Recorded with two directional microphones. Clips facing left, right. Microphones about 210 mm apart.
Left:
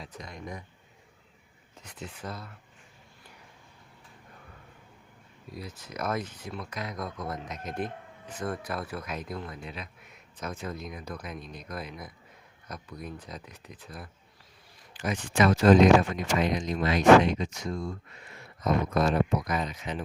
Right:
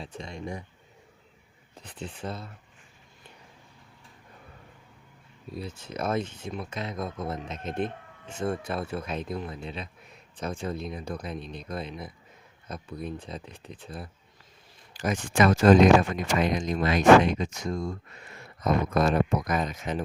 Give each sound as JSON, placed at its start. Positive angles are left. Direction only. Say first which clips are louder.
{"t": 0.0, "sound": "speech", "louder": "right 4 dB", "side_deg": -25}
{"t": 1.7, "sound": "speech", "louder": "right 3 dB", "side_deg": -30}
{"t": 5.5, "sound": "speech", "louder": "right 3 dB", "side_deg": -30}
{"t": 14.9, "sound": "speech", "louder": "right 2 dB", "side_deg": -45}